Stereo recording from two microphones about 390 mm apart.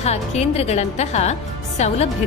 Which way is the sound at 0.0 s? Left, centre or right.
Centre.